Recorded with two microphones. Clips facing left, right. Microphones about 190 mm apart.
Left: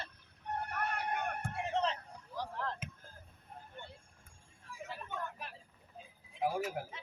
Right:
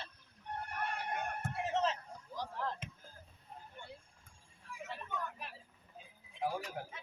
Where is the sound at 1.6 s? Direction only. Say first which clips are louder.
Even; 5° right (ahead or behind).